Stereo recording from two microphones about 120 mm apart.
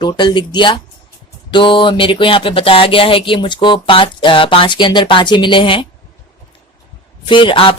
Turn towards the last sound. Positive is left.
turn(degrees=45)  # may be behind; listen again after turning